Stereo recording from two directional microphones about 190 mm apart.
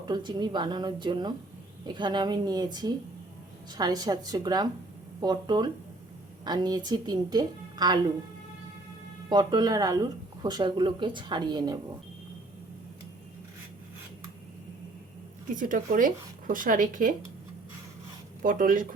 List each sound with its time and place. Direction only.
0.0 s speech: 25° right (ahead or behind)
9.3 s speech: 20° right (ahead or behind)
15.5 s speech: 45° right (ahead or behind)
18.4 s speech: 45° right (ahead or behind)